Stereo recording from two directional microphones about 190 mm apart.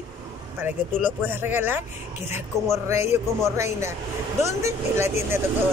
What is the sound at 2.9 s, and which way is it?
Speech, 15° right (ahead or behind).